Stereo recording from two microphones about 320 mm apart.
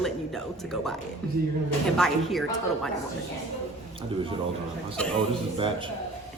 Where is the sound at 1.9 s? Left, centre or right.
Centre.